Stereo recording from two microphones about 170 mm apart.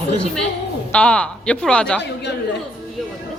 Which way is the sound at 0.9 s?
5° left (ahead or behind).